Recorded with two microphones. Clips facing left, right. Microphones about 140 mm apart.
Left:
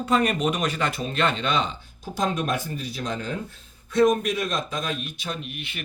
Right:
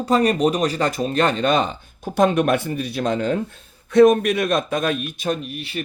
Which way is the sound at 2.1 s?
65° right (ahead or behind).